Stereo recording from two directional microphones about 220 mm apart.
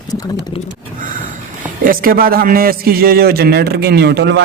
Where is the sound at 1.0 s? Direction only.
40° right (ahead or behind).